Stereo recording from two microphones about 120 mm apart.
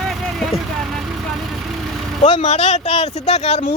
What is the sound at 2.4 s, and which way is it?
Speech, 65° left (ahead or behind).